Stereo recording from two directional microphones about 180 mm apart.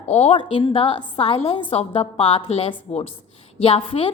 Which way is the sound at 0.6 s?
30° left (ahead or behind).